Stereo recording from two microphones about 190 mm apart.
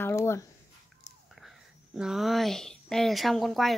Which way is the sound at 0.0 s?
15° left (ahead or behind).